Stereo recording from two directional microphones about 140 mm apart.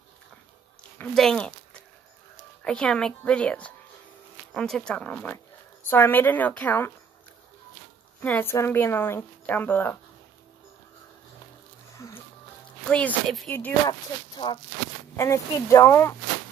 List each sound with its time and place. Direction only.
0.9 s speech: 5° left (ahead or behind)
8.2 s speech: 15° left (ahead or behind)
12.0 s music: 20° left (ahead or behind)
12.9 s speech: 5° left (ahead or behind)
13.8 s speech: 30° left (ahead or behind)
15.1 s speech: 20° left (ahead or behind)